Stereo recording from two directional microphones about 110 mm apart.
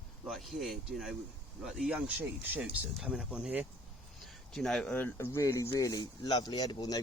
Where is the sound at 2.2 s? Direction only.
15° right (ahead or behind).